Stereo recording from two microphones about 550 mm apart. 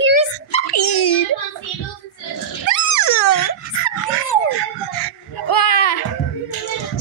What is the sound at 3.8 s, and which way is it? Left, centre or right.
Dog, left.